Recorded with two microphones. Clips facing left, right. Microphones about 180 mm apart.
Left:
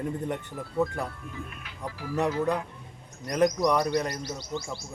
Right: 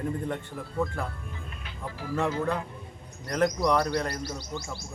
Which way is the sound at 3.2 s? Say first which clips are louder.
Left 2 dB; 15° left (ahead or behind).